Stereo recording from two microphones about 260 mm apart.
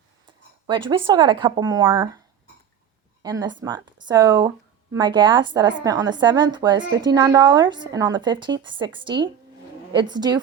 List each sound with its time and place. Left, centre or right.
0.9 s speech: centre
3.2 s speech: centre